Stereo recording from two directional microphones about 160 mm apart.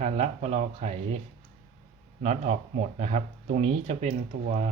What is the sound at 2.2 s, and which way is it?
Speech, 50° right (ahead or behind).